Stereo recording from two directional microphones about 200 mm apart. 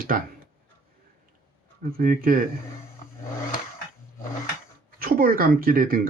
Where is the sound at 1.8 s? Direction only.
45° right (ahead or behind).